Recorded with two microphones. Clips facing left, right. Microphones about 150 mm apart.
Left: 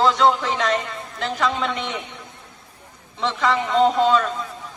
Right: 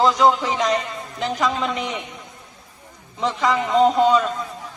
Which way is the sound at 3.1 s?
Centre (ahead or behind).